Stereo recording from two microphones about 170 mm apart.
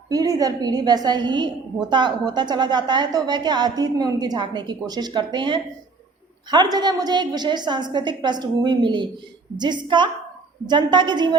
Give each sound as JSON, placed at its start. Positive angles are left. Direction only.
{"t": 0.1, "sound": "a woman's voice", "side_deg": -20}